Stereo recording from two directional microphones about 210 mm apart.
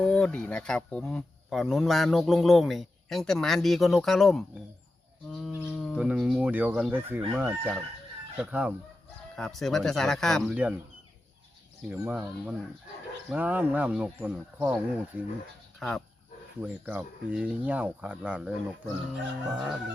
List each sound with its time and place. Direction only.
0.0 s speech: 5° left (ahead or behind)
5.3 s livestock: centre (ahead or behind)
5.5 s chicken: 5° left (ahead or behind)
7.3 s speech: 10° right (ahead or behind)
11.9 s speech: 5° right (ahead or behind)
15.8 s speech: 5° left (ahead or behind)